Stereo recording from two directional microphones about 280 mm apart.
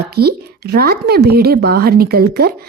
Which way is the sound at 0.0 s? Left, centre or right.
Right.